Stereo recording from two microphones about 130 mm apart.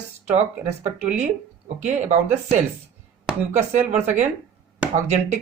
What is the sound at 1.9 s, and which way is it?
Speech, 65° right (ahead or behind).